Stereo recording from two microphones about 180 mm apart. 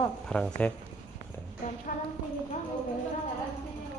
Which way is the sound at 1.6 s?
45° left (ahead or behind).